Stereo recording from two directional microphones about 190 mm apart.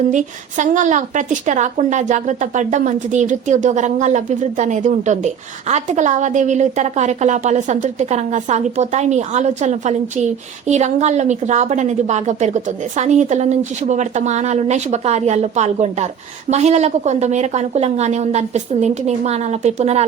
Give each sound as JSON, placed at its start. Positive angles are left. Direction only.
{"t": 0.1, "sound": "speech", "side_deg": -40}